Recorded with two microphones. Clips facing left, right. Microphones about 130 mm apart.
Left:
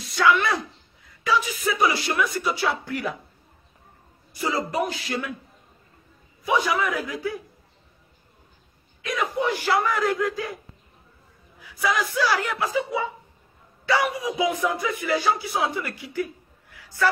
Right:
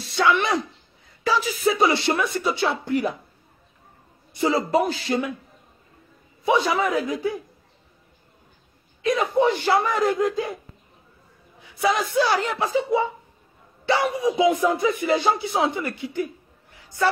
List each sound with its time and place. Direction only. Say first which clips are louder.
0.0 s a sound: even; 25° right (ahead or behind)
1.4 s speech: right 3 dB; 30° right (ahead or behind)
4.3 s speech: right 6 dB; 25° right (ahead or behind)
6.4 s speech: right 2 dB; 25° right (ahead or behind)
9.0 s speech: right 6 dB; 25° right (ahead or behind)
11.6 s speech: right 3 dB; 25° right (ahead or behind)
16.7 s a sound: right 1 dB; 25° right (ahead or behind)